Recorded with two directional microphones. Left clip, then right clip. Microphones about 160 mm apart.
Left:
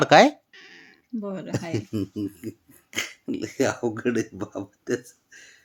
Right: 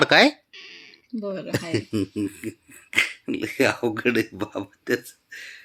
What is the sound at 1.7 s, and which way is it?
Speech, 5° right (ahead or behind).